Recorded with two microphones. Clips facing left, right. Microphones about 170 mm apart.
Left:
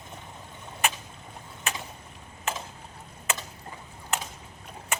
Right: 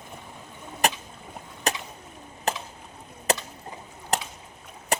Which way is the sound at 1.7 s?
40° right (ahead or behind).